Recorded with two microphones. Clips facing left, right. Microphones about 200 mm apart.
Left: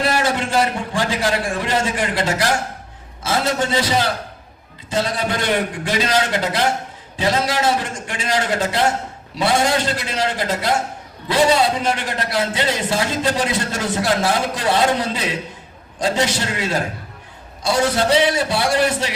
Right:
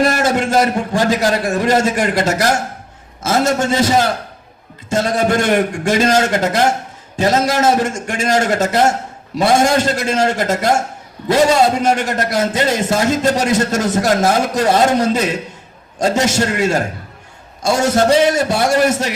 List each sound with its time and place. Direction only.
0.0 s a man's voice: 45° right (ahead or behind)